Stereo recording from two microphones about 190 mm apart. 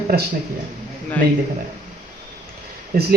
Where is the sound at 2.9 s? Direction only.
45° right (ahead or behind).